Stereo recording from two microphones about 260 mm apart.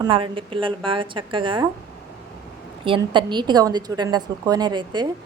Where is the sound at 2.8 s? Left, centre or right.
Centre.